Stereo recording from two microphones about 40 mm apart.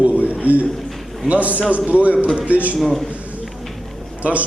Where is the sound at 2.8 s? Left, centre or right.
Centre.